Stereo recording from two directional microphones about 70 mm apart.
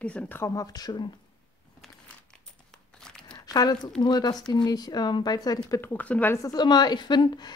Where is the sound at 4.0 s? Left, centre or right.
Left.